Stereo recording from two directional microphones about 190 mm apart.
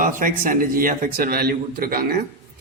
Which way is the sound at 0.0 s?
45° right (ahead or behind).